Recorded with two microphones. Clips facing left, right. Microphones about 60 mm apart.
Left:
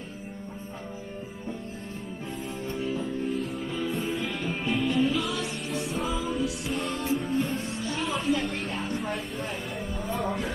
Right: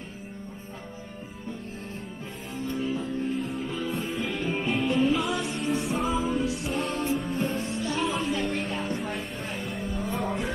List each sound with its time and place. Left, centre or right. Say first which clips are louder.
2.8 s music: even; centre
6.3 s music: right 2 dB; right
7.1 s music: left 1 dB; centre